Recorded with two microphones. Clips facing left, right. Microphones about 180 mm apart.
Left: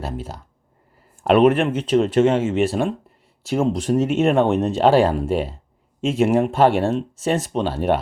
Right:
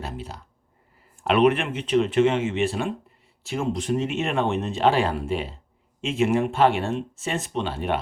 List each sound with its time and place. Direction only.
1.2 s speech: 45° left (ahead or behind)